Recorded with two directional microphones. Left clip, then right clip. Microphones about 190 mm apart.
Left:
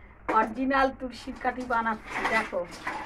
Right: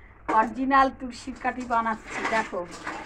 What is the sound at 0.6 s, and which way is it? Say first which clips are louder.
A woman's voice: right 4 dB; 10° left (ahead or behind).